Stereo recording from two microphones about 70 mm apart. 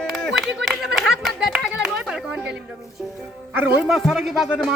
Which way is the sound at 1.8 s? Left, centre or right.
Centre.